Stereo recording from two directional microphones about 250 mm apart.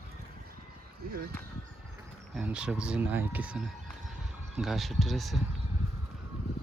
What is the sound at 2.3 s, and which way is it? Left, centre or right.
Speech, centre.